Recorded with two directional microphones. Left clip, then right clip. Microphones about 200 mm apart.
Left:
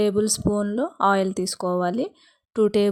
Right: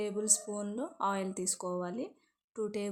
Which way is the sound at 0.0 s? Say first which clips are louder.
Left 12 dB; 40° left (ahead or behind).